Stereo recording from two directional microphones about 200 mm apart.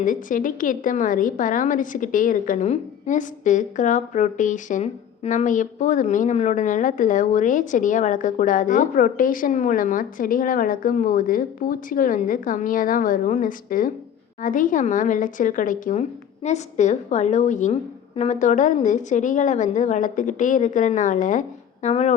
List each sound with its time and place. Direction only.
0.0 s a woman's voice: 40° left (ahead or behind)